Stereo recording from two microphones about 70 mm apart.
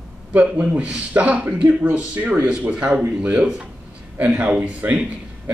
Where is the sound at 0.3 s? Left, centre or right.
Right.